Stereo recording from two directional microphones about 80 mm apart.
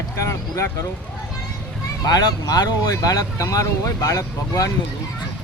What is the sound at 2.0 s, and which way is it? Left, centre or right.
Speech, left.